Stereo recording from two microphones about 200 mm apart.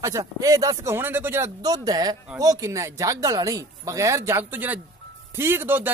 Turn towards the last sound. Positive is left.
turn(degrees=-10)  # may be behind; listen again after turning